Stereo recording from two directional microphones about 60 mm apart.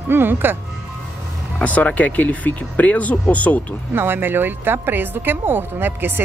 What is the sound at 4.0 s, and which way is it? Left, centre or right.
Speech, right.